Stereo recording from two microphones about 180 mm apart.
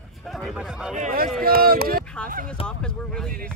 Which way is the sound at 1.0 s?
55° right (ahead or behind).